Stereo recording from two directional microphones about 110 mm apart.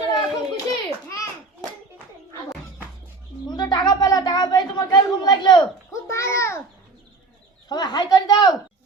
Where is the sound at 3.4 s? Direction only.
40° left (ahead or behind).